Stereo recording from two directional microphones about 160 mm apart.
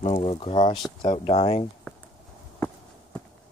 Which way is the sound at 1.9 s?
10° left (ahead or behind).